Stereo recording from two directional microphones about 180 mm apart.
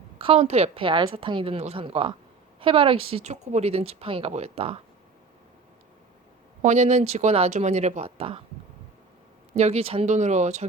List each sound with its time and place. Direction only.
0.2 s speech: 35° right (ahead or behind)
6.6 s speech: 40° right (ahead or behind)
9.6 s speech: 35° right (ahead or behind)